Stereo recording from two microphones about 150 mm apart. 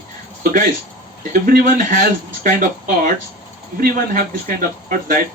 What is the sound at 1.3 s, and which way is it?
Speech, 65° right (ahead or behind).